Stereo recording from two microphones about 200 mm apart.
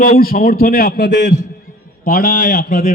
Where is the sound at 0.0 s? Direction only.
45° left (ahead or behind).